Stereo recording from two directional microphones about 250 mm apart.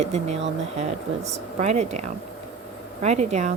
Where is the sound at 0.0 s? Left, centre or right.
Right.